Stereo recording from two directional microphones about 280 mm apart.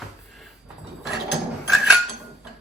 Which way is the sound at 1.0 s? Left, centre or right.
Centre.